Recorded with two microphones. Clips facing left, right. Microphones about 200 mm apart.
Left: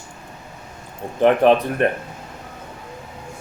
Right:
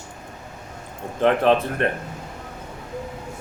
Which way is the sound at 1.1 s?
15° left (ahead or behind).